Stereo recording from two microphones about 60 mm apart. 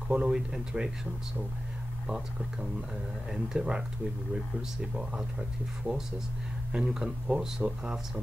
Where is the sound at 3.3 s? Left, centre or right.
Centre.